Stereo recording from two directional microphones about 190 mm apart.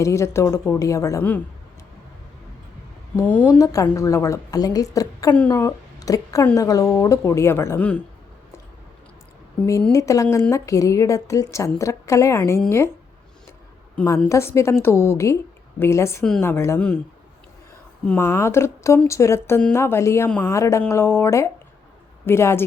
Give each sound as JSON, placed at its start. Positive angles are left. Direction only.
{"t": 0.0, "sound": "a woman's voice", "side_deg": 15}
{"t": 3.2, "sound": "a woman's voice", "side_deg": 10}
{"t": 9.9, "sound": "a woman's voice", "side_deg": 15}
{"t": 13.9, "sound": "a woman's voice", "side_deg": 10}
{"t": 18.0, "sound": "a woman's voice", "side_deg": 10}